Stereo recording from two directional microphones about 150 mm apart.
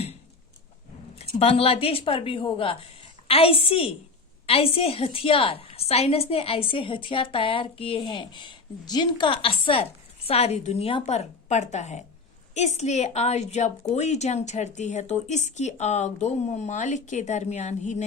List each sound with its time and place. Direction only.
1.4 s a woman's voice: 40° left (ahead or behind)